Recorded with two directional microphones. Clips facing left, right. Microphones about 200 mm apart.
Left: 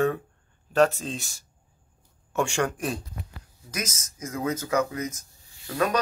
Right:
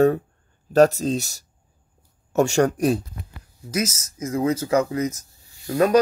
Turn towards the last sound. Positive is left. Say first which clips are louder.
# right 8 dB
turn(degrees=-40)  # may be behind; listen again after turning